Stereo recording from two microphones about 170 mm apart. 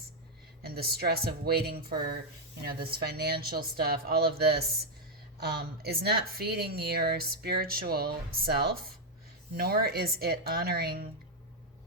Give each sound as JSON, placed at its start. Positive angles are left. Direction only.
{"t": 0.6, "sound": "speech", "side_deg": -65}
{"t": 5.8, "sound": "speech", "side_deg": -70}